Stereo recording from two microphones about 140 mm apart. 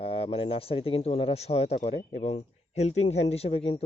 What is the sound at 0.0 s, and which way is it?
Speech, 40° left (ahead or behind).